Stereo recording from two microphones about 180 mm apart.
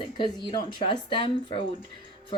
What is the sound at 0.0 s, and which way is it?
A woman's voice, 25° left (ahead or behind).